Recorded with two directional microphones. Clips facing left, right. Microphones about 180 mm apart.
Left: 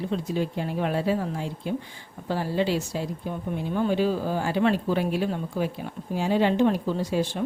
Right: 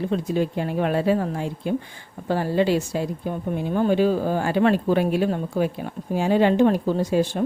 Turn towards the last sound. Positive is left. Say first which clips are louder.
# right 5 dB
turn(degrees=-45)  # may be behind; listen again after turning